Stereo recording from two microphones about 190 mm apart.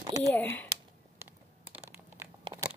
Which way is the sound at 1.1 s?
10° right (ahead or behind).